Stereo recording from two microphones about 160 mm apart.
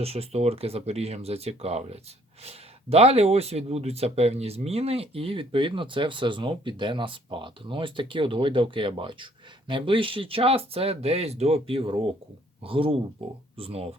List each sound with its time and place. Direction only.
0.0 s speech: 40° right (ahead or behind)